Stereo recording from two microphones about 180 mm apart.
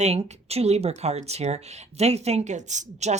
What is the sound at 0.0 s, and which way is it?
Speech, 35° right (ahead or behind).